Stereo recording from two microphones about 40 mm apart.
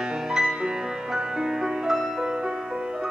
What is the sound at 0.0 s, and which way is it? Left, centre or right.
Music, centre.